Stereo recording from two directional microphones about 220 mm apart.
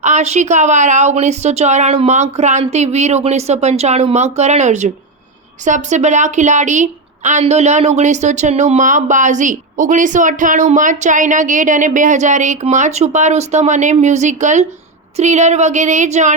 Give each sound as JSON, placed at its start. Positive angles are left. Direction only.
{"t": 0.0, "sound": "a woman's voice", "side_deg": -30}